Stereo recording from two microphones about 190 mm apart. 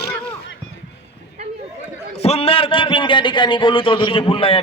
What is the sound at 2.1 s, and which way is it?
A man's voice, 30° left (ahead or behind).